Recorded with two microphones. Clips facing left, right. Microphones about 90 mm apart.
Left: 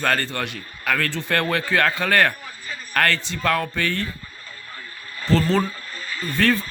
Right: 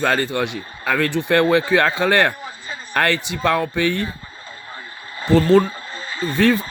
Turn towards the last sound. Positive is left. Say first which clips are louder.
# right 4 dB
turn(degrees=-15)  # may be behind; listen again after turning